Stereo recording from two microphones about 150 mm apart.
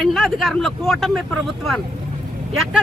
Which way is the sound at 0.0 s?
Centre (ahead or behind).